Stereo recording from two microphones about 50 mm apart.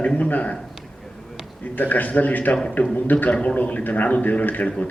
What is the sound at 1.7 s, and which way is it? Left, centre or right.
A man's voice, left.